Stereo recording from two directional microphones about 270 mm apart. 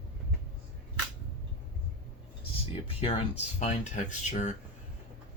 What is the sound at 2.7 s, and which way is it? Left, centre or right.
Speech, left.